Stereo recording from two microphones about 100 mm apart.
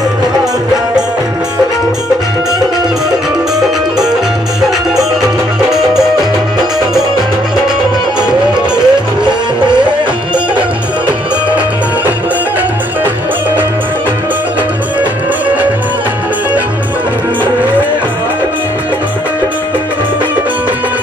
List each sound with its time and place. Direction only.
8.7 s music: 50° right (ahead or behind)